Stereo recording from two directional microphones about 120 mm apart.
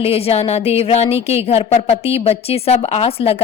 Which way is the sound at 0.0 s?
55° left (ahead or behind).